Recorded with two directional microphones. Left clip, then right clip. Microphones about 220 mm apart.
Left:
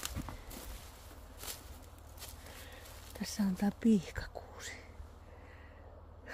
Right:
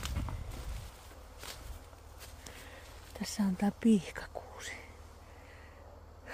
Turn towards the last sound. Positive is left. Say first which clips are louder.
# right 3 dB
turn(degrees=-5)  # may be behind; listen again after turning